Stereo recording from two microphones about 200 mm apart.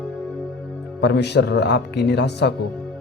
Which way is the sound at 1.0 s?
60° left (ahead or behind).